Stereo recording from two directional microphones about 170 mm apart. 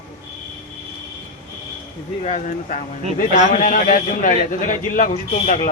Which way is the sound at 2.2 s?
45° left (ahead or behind).